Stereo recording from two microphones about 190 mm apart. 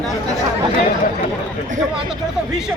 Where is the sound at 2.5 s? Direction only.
5° right (ahead or behind).